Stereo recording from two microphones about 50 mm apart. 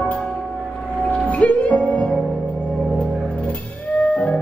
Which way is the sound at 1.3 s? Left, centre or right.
Left.